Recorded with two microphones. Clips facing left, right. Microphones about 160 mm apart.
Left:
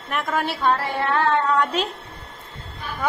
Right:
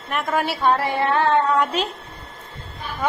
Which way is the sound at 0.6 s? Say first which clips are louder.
Right 3 dB; 15° right (ahead or behind).